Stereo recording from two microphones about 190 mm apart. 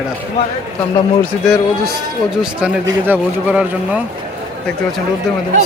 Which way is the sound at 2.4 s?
5° right (ahead or behind).